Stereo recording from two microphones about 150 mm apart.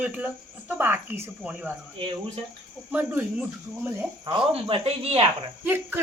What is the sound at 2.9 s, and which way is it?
Speech, 10° right (ahead or behind).